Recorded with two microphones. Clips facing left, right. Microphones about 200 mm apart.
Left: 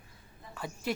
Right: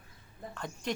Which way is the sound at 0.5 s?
5° left (ahead or behind).